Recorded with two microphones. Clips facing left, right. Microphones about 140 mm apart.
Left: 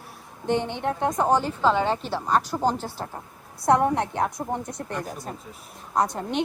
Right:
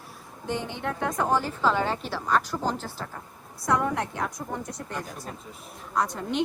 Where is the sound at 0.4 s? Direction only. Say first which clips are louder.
Left 6 dB; 60° left (ahead or behind).